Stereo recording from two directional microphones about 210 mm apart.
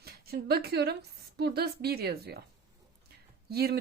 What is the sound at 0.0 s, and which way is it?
A woman's voice, 50° right (ahead or behind).